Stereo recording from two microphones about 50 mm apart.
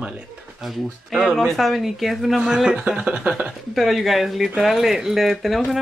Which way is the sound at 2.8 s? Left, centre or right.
Right.